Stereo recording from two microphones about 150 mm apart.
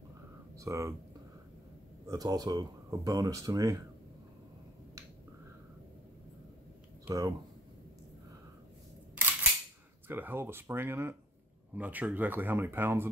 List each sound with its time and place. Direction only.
0.6 s speech: 20° right (ahead or behind)
2.0 s speech: 25° right (ahead or behind)
7.1 s speech: 20° right (ahead or behind)
9.1 s cap gun: 10° right (ahead or behind)
10.0 s speech: 15° right (ahead or behind)